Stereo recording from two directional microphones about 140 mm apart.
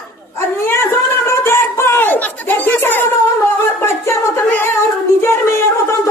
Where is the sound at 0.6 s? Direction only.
20° left (ahead or behind).